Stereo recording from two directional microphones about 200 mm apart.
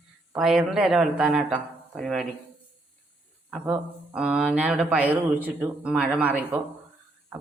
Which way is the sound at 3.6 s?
5° right (ahead or behind).